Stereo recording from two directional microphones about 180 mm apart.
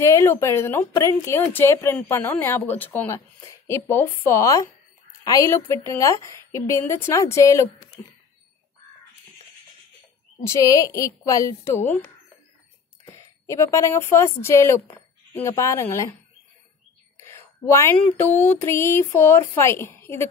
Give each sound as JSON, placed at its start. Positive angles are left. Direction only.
{"t": 0.0, "sound": "a woman's voice", "side_deg": 15}
{"t": 10.4, "sound": "a woman's voice", "side_deg": 20}
{"t": 17.2, "sound": "a woman's voice", "side_deg": 15}